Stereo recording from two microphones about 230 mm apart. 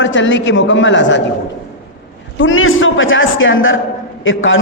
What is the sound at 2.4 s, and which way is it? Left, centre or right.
A man's voice, left.